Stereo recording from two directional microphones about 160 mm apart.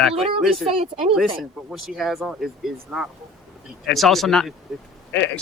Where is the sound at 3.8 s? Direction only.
Centre (ahead or behind).